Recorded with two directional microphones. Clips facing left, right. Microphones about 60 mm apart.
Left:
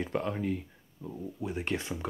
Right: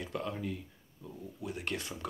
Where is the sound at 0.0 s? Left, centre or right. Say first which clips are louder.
Left 5 dB; left.